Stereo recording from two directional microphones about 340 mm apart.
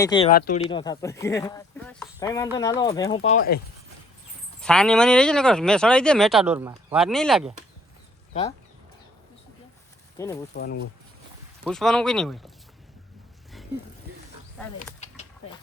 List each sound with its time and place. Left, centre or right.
0.0 s speech: centre
0.3 s speech: left
0.7 s speech: centre
3.2 s speech: left
4.6 s speech: centre
8.3 s speech: centre
10.2 s speech: centre
10.5 s speech: left
11.6 s speech: centre
15.0 s a sound: centre